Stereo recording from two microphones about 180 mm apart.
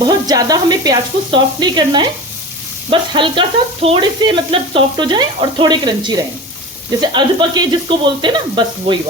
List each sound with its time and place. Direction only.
0.0 s speech: 20° right (ahead or behind)